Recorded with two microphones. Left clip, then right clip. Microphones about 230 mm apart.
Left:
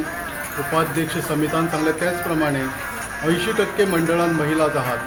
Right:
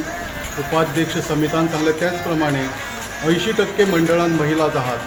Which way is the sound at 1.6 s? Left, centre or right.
Centre.